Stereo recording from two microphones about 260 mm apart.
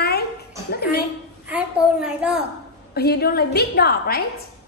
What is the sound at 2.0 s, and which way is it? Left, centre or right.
Speech, centre.